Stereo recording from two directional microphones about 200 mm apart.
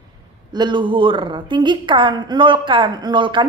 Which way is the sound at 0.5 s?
20° right (ahead or behind).